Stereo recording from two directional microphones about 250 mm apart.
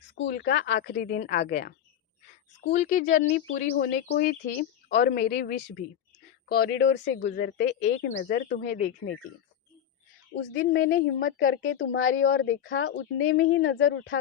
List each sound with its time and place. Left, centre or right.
0.3 s speech: left
2.7 s speech: left
10.3 s speech: left
11.3 s speech: left